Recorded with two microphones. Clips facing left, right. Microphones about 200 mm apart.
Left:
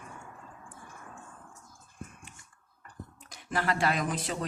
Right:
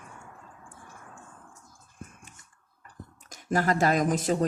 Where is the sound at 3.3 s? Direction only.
45° right (ahead or behind).